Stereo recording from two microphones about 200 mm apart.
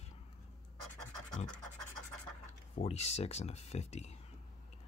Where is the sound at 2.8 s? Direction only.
30° left (ahead or behind).